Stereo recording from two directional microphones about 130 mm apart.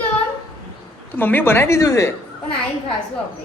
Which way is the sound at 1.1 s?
15° left (ahead or behind).